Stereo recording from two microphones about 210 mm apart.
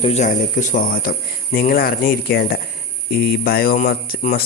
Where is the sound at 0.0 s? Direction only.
30° left (ahead or behind).